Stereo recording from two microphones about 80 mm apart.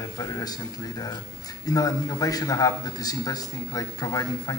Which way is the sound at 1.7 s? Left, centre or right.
Left.